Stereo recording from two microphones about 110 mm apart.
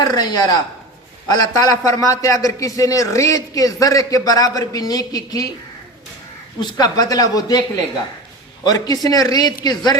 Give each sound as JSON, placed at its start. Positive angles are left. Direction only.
{"t": 0.0, "sound": "a man's voice", "side_deg": 40}
{"t": 6.6, "sound": "a man's voice", "side_deg": 40}
{"t": 8.6, "sound": "a man's voice", "side_deg": 35}